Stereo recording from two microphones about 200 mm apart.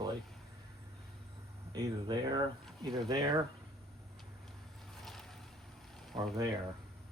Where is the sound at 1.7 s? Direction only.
20° right (ahead or behind).